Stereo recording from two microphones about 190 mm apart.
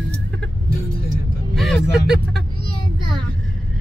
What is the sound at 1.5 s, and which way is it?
Speech, centre (ahead or behind).